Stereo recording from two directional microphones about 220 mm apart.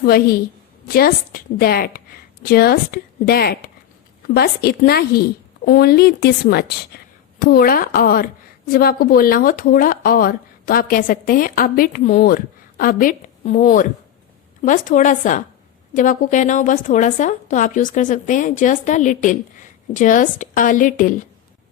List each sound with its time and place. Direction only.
0.0 s a woman's voice: 45° left (ahead or behind)